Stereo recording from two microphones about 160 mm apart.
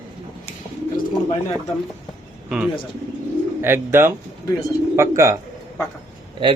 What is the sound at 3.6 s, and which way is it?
Speech, 15° right (ahead or behind).